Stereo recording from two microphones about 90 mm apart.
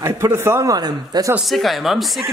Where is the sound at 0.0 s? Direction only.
30° right (ahead or behind).